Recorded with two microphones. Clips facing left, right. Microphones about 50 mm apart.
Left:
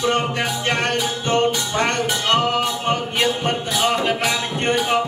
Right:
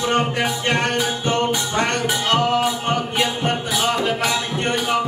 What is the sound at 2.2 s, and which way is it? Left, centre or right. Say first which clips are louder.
Music: right 1 dB; centre.